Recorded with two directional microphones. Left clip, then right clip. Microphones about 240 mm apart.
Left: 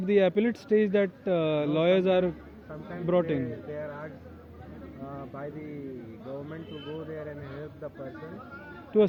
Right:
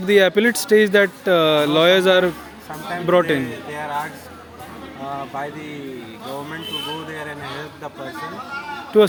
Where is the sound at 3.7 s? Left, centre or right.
Right.